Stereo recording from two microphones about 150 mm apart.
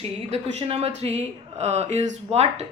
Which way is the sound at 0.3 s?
40° right (ahead or behind).